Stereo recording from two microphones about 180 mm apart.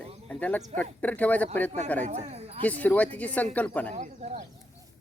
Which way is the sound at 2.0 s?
40° right (ahead or behind).